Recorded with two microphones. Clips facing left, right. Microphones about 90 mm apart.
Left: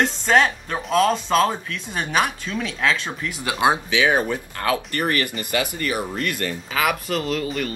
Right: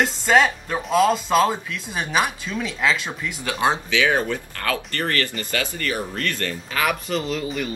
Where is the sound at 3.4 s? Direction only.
15° left (ahead or behind).